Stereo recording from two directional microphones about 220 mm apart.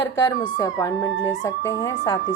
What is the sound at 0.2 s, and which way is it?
Speech, 15° left (ahead or behind).